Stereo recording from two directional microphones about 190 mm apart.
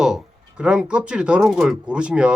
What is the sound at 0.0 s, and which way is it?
Speech, 5° right (ahead or behind).